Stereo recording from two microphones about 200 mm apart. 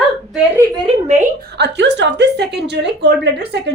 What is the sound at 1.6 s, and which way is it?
Speech, 60° right (ahead or behind).